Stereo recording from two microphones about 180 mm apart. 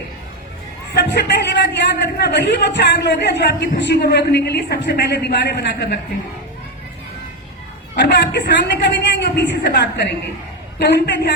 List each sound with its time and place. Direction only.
0.9 s a man's voice: 70° left (ahead or behind)
7.9 s a man's voice: 70° left (ahead or behind)